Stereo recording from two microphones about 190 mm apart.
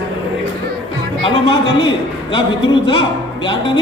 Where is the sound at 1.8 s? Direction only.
25° left (ahead or behind).